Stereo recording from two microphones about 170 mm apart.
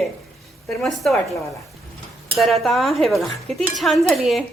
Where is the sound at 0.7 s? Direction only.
Centre (ahead or behind).